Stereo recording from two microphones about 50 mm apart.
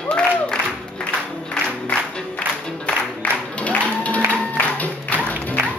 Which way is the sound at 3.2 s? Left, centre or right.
Left.